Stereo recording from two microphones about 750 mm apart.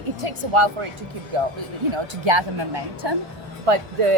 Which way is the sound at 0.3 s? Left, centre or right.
Right.